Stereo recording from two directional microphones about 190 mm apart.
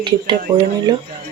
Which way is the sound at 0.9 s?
25° right (ahead or behind).